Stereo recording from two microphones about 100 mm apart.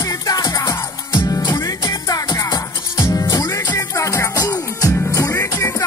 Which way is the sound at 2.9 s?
30° left (ahead or behind).